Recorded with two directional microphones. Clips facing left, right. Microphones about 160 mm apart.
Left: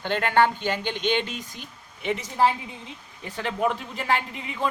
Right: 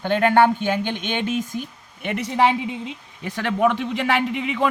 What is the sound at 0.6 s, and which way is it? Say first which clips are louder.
Speech: right 3 dB; 50° right (ahead or behind).